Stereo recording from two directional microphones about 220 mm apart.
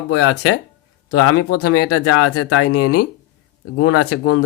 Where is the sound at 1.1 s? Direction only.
90° left.